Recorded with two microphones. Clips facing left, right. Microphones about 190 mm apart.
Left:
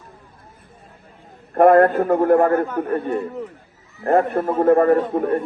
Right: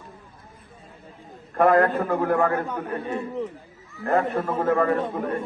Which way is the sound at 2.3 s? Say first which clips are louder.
Left 7 dB; 35° left (ahead or behind).